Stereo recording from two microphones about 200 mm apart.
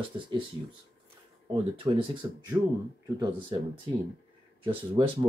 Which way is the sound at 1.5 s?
25° right (ahead or behind).